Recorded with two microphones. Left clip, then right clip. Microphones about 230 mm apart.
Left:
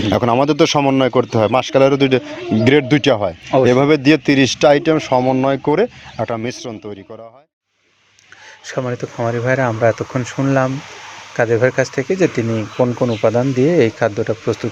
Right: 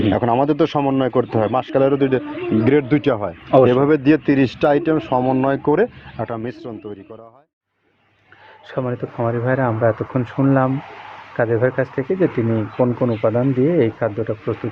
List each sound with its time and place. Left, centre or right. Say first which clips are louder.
0.1 s speech: left 5 dB; left
8.7 s speech: left 2 dB; centre